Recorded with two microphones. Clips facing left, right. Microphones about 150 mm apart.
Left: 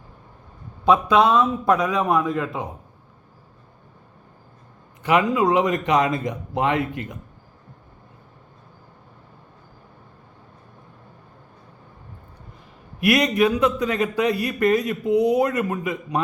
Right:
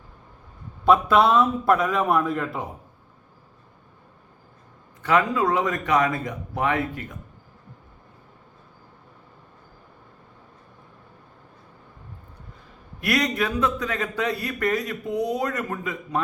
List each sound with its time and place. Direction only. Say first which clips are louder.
0.9 s a man's voice: left 1 dB; 5° right (ahead or behind)
5.0 s speech: left 2 dB; 15° left (ahead or behind)
13.0 s a man's voice: left 6 dB; 15° left (ahead or behind)